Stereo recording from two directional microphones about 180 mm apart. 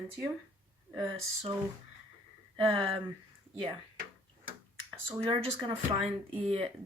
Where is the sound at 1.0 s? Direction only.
30° right (ahead or behind).